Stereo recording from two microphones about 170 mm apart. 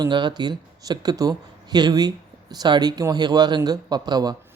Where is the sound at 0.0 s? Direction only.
25° right (ahead or behind).